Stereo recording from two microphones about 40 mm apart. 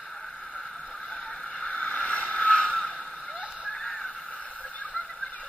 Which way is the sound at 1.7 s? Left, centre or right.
Left.